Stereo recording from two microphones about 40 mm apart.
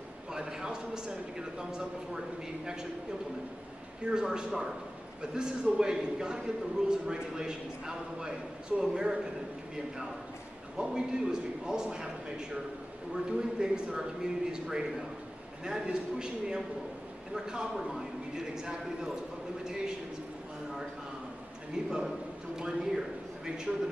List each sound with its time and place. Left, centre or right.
0.3 s a man's voice: centre
4.0 s a man's voice: centre
10.8 s a man's voice: centre
21.8 s a man's voice: right
22.6 s a sound: centre